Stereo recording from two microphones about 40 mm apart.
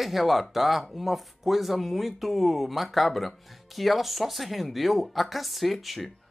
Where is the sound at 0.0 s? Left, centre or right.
Centre.